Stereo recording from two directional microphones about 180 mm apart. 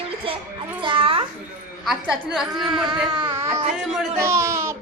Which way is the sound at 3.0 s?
25° right (ahead or behind).